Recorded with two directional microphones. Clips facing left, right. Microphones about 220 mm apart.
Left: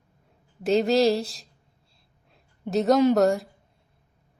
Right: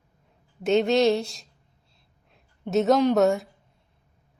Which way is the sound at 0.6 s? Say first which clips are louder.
Even; centre (ahead or behind).